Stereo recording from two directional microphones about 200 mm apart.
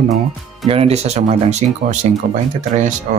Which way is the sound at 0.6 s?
30° right (ahead or behind).